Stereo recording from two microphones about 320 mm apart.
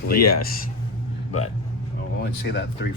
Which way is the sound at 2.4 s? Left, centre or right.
Left.